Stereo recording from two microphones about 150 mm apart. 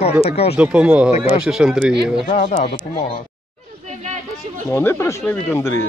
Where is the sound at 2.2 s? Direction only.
40° left (ahead or behind).